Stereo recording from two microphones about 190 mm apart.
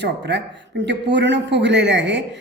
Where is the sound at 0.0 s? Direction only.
65° right (ahead or behind).